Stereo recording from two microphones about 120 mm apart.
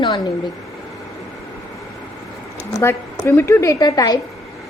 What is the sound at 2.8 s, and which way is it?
A woman's voice, 20° left (ahead or behind).